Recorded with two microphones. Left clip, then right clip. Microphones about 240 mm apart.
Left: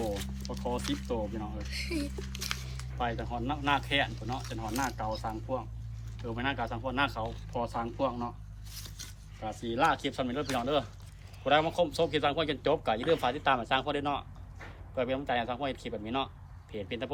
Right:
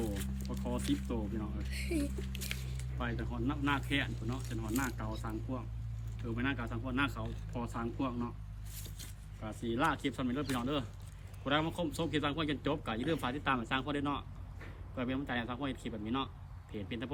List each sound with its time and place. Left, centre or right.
0.0 s a sound: centre
1.0 s speech: centre
1.7 s speech: centre
3.0 s speech: centre
9.4 s speech: centre